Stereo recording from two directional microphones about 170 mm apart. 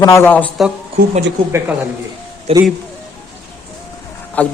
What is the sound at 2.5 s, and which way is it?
Speech, 35° right (ahead or behind).